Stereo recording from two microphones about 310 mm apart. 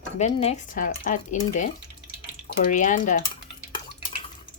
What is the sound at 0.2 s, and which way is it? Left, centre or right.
Speech, centre.